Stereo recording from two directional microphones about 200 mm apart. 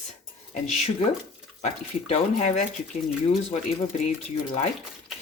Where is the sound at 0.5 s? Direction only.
35° left (ahead or behind).